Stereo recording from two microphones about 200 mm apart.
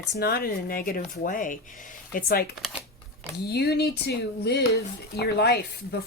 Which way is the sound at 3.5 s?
55° left (ahead or behind).